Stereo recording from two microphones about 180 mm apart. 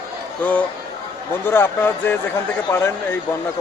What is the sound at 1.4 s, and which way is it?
Speech, 10° left (ahead or behind).